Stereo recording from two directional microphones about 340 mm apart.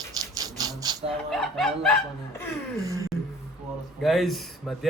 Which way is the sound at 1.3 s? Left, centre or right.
Centre.